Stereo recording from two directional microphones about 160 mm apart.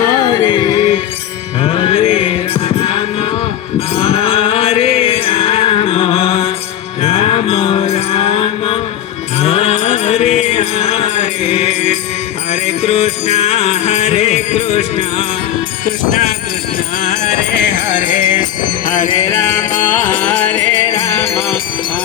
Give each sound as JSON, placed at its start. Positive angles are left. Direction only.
{"t": 0.2, "sound": "music", "side_deg": 25}
{"t": 7.0, "sound": "mantra", "side_deg": 40}
{"t": 9.4, "sound": "music", "side_deg": 40}
{"t": 19.3, "sound": "music", "side_deg": 15}